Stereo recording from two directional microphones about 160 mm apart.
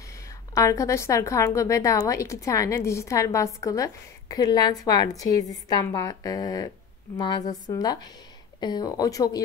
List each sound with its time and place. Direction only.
0.6 s speech: 20° left (ahead or behind)